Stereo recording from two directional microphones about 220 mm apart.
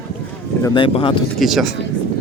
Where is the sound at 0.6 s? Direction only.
20° left (ahead or behind).